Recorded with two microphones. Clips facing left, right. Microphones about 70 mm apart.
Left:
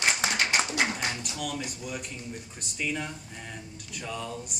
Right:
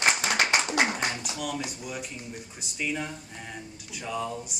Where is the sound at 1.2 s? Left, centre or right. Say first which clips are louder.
Right 2 dB; centre.